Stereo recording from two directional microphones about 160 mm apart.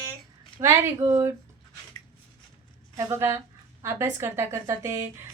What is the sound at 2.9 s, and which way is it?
A woman's voice, 20° right (ahead or behind).